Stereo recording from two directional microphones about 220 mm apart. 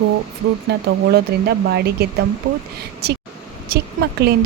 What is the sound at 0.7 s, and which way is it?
Speech, 45° right (ahead or behind).